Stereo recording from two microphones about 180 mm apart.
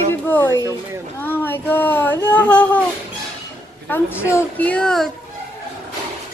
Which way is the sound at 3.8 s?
10° left (ahead or behind).